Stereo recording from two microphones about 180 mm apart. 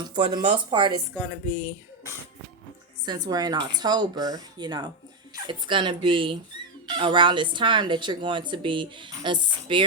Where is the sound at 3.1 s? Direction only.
20° right (ahead or behind).